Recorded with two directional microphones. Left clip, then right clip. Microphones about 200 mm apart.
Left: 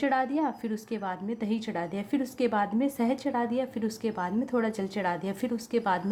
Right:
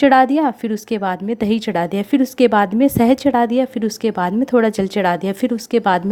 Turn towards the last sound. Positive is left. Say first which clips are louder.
# right 12 dB
turn(degrees=-35)  # may be behind; listen again after turning